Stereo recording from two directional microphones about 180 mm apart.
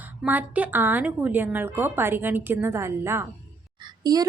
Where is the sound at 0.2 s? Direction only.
10° right (ahead or behind).